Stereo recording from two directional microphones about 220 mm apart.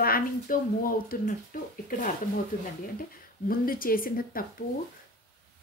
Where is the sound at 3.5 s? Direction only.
40° left (ahead or behind).